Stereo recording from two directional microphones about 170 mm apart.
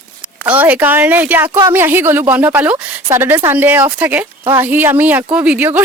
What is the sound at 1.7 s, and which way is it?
Speech, 10° right (ahead or behind).